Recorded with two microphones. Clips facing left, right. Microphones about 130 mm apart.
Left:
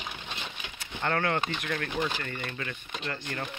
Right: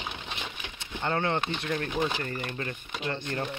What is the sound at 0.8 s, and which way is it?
Speech, 20° right (ahead or behind).